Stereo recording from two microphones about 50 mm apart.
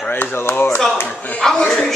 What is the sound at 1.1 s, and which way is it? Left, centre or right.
Speech, left.